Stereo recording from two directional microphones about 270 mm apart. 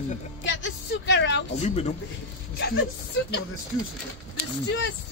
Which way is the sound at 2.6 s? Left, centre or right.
Left.